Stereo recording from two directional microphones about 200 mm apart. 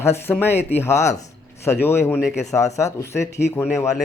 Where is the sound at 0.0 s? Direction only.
10° left (ahead or behind).